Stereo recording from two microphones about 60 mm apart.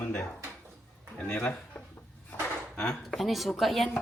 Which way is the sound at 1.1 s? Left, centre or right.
Left.